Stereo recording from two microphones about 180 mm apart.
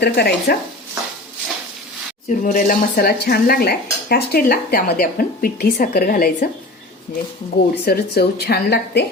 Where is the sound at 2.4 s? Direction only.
50° left (ahead or behind).